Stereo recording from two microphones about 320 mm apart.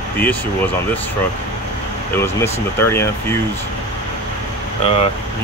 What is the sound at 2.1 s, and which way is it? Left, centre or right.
Speech, centre.